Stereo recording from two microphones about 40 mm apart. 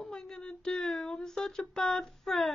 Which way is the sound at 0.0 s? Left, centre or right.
Centre.